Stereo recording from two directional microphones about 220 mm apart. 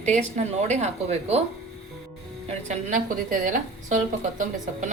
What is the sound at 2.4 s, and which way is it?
A woman's voice, 35° right (ahead or behind).